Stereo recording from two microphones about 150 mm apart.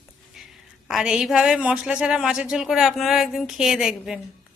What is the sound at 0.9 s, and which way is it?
Speech, 5° right (ahead or behind).